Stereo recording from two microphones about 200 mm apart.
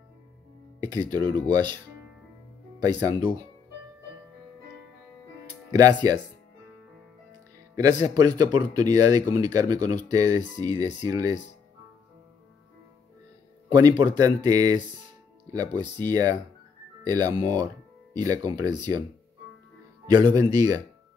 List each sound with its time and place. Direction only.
0.8 s speech: 20° right (ahead or behind)
5.7 s speech: 20° right (ahead or behind)
7.7 s speech: 20° right (ahead or behind)
13.7 s speech: 20° right (ahead or behind)
15.8 s speech: 20° right (ahead or behind)
20.1 s speech: 20° right (ahead or behind)